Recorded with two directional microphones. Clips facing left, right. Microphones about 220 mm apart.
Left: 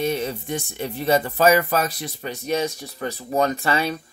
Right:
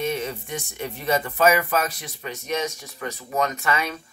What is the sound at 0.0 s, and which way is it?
Speech, 35° left (ahead or behind).